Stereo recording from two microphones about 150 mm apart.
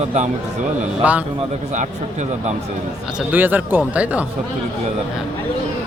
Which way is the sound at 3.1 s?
10° right (ahead or behind).